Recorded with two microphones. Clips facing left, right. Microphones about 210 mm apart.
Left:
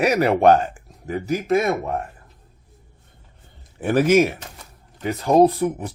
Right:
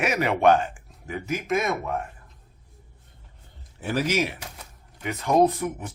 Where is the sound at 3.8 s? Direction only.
55° left (ahead or behind).